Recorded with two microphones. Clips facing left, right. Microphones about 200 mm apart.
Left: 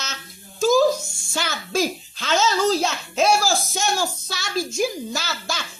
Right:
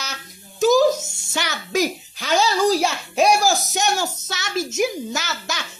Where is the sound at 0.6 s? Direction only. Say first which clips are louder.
Right 2 dB; 20° right (ahead or behind).